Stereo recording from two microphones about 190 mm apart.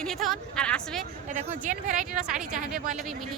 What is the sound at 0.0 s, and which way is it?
A woman's voice, centre (ahead or behind).